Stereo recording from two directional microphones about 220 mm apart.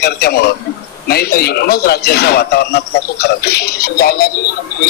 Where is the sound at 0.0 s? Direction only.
45° left (ahead or behind).